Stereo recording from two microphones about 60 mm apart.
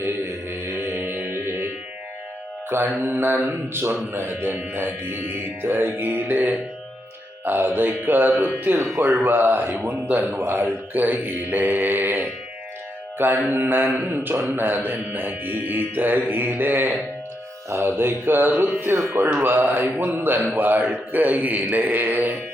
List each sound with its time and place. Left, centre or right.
0.0 s mantra: right
3.0 s a man's voice: right
13.1 s mantra: right
13.5 s speech: right